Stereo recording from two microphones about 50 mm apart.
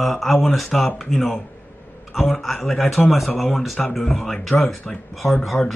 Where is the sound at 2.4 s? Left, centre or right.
Centre.